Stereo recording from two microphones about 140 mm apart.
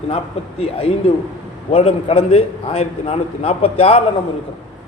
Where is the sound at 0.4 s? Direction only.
45° left (ahead or behind).